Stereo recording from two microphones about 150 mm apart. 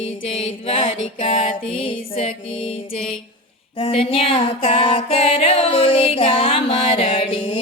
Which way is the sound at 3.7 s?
40° left (ahead or behind).